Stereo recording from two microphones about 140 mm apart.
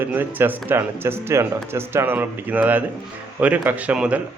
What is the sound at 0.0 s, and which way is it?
Speech, 15° right (ahead or behind).